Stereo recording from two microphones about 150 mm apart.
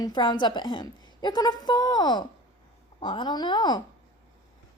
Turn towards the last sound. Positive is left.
turn(degrees=25)  # may be behind; listen again after turning